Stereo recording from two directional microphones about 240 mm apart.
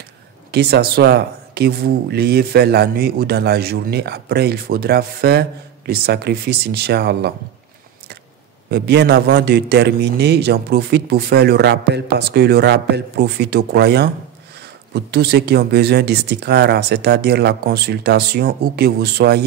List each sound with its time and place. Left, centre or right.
0.5 s speech: right
8.6 s a man's voice: right